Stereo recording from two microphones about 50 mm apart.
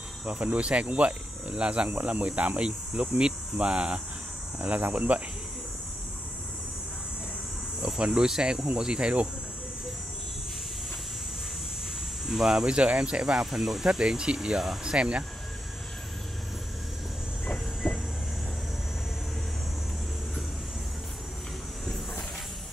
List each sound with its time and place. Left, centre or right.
0.2 s speech: right
4.6 s speech: right
7.8 s speech: centre
12.3 s speech: centre
12.6 s speech: right
13.4 s speech: centre; by 15.2 s right
17.8 s vehicle: centre